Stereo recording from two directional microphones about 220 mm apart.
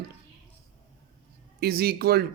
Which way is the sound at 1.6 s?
45° right (ahead or behind).